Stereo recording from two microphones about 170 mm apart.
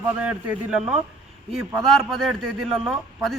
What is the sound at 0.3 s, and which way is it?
A man's voice, 5° right (ahead or behind).